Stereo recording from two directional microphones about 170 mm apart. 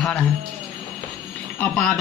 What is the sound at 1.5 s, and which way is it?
Speech, 5° left (ahead or behind).